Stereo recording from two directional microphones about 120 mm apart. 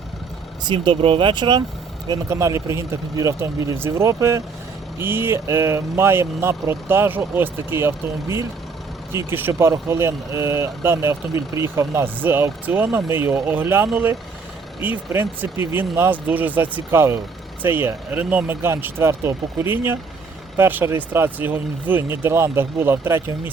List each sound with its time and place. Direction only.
0.6 s speech: 40° right (ahead or behind)
2.3 s speech: 25° right (ahead or behind)